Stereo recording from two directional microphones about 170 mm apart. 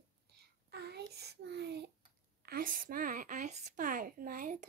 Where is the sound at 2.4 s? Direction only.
60° right (ahead or behind).